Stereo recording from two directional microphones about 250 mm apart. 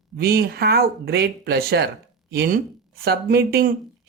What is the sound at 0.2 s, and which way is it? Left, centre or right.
A man's voice, right.